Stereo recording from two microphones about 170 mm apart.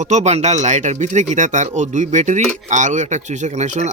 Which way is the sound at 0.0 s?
45° right (ahead or behind).